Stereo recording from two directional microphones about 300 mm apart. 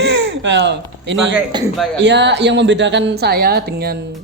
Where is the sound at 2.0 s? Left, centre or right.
Right.